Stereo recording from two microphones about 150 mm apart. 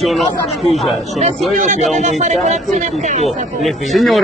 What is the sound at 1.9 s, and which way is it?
Speech, 50° right (ahead or behind).